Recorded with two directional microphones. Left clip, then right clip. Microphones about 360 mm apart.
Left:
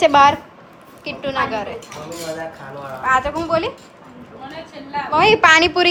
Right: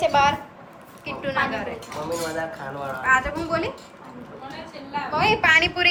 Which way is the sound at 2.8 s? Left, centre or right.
Centre.